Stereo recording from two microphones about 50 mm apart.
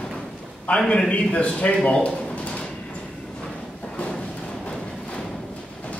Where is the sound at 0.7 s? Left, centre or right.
Left.